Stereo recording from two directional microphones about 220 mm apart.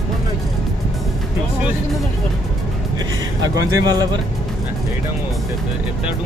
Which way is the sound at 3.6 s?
15° right (ahead or behind).